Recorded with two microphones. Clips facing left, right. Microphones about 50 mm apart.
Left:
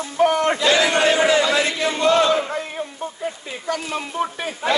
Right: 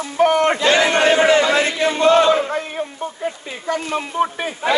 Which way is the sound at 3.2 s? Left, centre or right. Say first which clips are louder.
Right 2 dB; right.